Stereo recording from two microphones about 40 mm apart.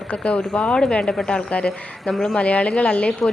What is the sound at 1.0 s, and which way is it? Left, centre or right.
Speech, centre.